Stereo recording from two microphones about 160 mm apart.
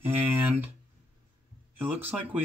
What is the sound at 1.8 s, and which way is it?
Speech, 10° right (ahead or behind).